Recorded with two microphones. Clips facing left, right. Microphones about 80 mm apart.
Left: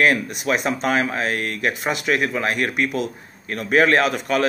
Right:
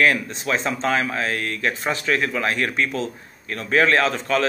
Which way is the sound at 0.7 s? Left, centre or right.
Centre.